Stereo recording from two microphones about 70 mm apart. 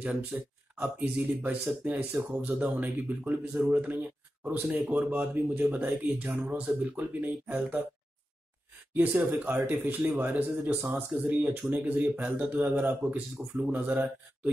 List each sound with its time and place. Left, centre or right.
0.3 s speech: right
8.9 s speech: right
10.3 s speech: right